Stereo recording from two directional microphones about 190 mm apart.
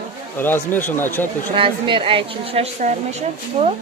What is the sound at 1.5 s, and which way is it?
A woman's voice, 25° right (ahead or behind).